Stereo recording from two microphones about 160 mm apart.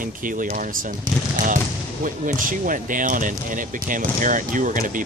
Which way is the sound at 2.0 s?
55° right (ahead or behind).